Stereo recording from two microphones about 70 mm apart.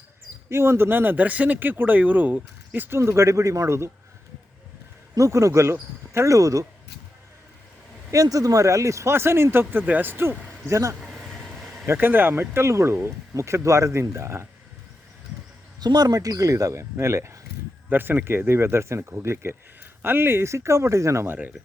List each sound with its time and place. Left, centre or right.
0.5 s speech: right
3.0 s speech: right
5.1 s speech: right
8.1 s speech: right
10.7 s speech: right
11.4 s a sound: centre
11.9 s speech: right
15.8 s speech: right
17.8 s speech: right